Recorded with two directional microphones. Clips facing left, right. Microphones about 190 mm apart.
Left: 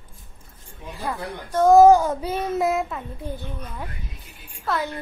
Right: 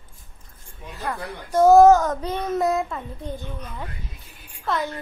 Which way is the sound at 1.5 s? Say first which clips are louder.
Right 1 dB; 5° right (ahead or behind).